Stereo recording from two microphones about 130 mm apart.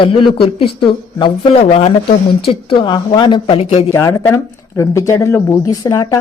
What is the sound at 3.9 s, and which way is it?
A woman's voice, 20° left (ahead or behind).